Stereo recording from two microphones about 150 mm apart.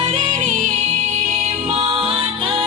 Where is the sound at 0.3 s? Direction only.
55° right (ahead or behind).